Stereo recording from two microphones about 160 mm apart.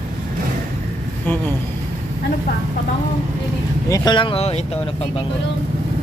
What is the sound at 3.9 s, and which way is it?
Speech, 30° left (ahead or behind).